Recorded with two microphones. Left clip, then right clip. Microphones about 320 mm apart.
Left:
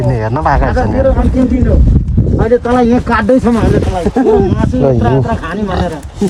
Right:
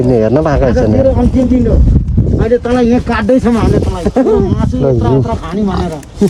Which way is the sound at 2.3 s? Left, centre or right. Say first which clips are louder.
Left 1 dB; centre.